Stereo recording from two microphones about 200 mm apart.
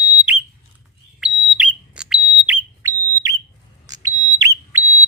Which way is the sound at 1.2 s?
5° right (ahead or behind).